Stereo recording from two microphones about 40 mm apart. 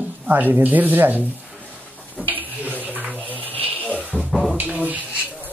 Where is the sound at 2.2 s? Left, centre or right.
Right.